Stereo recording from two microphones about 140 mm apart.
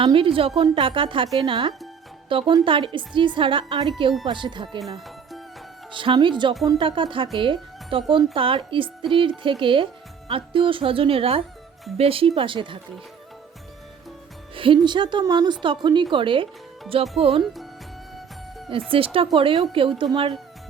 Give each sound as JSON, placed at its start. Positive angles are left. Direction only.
{"t": 0.0, "sound": "speech", "side_deg": -40}
{"t": 4.9, "sound": "music", "side_deg": 0}
{"t": 5.9, "sound": "speech", "side_deg": -35}
{"t": 14.5, "sound": "music", "side_deg": -40}
{"t": 14.8, "sound": "speech", "side_deg": -35}
{"t": 17.4, "sound": "speech", "side_deg": 0}
{"t": 18.9, "sound": "speech", "side_deg": -40}